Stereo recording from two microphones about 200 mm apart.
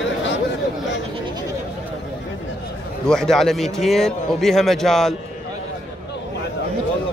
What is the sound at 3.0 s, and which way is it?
A man's voice, centre (ahead or behind).